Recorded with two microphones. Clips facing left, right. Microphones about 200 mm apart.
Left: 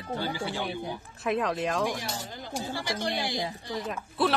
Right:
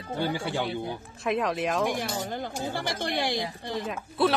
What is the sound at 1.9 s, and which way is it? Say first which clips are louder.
Speech: right 4 dB; 55° right (ahead or behind).